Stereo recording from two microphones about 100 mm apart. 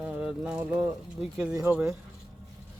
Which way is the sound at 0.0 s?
10° right (ahead or behind).